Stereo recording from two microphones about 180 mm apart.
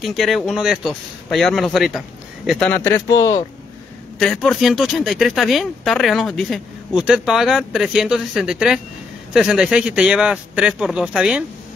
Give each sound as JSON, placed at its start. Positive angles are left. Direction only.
{"t": 0.0, "sound": "a man's voice", "side_deg": 0}
{"t": 2.7, "sound": "speech", "side_deg": 15}
{"t": 4.2, "sound": "speech", "side_deg": 0}